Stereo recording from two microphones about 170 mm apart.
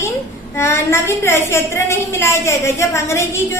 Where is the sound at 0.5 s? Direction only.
15° left (ahead or behind).